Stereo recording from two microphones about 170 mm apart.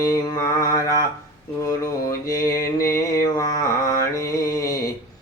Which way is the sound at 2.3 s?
20° left (ahead or behind).